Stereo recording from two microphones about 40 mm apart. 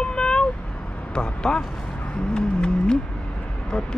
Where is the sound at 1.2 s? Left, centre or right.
Centre.